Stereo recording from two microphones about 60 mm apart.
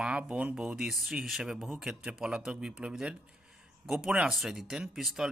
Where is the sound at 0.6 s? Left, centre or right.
Centre.